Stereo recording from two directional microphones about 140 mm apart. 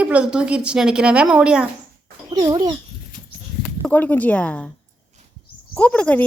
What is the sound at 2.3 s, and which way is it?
Speech, 30° right (ahead or behind).